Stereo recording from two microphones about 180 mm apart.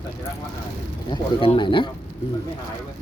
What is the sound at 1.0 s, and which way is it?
Speech, 30° left (ahead or behind).